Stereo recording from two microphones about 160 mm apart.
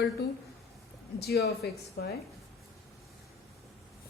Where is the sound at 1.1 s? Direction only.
85° left.